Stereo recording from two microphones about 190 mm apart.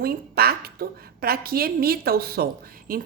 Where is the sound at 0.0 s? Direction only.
55° right (ahead or behind).